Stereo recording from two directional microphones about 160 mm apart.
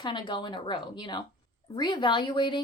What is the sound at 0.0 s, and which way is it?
Speech, 30° left (ahead or behind).